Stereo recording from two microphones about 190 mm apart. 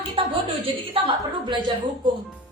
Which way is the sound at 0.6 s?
30° right (ahead or behind).